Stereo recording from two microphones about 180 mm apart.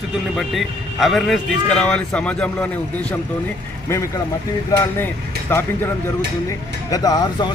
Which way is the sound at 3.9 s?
15° left (ahead or behind).